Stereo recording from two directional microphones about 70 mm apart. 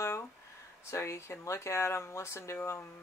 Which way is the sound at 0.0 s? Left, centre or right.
Left.